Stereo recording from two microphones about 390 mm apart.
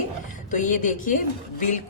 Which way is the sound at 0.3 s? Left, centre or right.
Centre.